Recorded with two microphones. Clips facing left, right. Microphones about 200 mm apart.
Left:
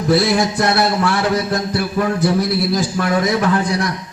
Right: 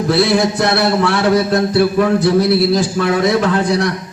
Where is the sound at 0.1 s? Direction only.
65° right (ahead or behind).